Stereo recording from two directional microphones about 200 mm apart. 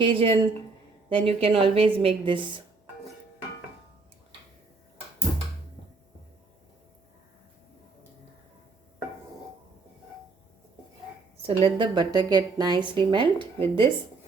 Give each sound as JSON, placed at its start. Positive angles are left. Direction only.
{"t": 0.0, "sound": "a woman's voice", "side_deg": -25}
{"t": 11.4, "sound": "a woman's voice", "side_deg": -25}